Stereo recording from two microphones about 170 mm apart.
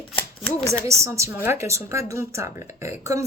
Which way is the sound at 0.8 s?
15° right (ahead or behind).